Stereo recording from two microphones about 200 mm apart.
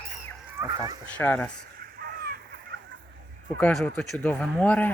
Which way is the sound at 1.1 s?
10° left (ahead or behind).